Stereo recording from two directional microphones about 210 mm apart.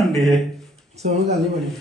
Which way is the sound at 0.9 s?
30° right (ahead or behind).